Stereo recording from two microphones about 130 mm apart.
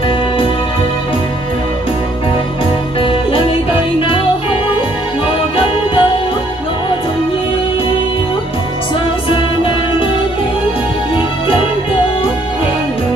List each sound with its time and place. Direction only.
3.0 s music: 45° left (ahead or behind)
5.6 s music: 45° left (ahead or behind)